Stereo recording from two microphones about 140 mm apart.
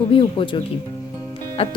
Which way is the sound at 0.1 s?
35° left (ahead or behind).